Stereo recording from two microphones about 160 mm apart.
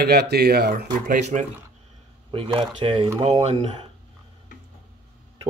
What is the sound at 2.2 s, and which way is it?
Speech, 35° right (ahead or behind).